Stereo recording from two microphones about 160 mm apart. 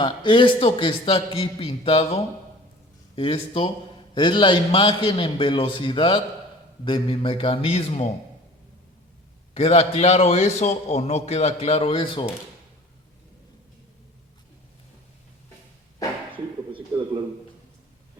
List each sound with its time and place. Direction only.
0.0 s a man's voice: 30° left (ahead or behind)
9.6 s a man's voice: 40° left (ahead or behind)